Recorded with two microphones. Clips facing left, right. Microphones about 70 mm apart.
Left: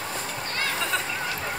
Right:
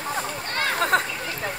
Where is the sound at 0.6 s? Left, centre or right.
Right.